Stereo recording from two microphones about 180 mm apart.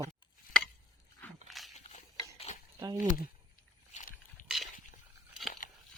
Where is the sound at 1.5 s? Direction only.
Centre (ahead or behind).